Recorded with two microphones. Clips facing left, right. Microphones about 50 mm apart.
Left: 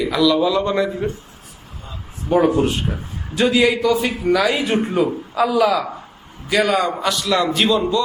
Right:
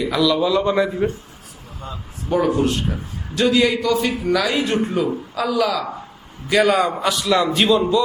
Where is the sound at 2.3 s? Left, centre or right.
Left.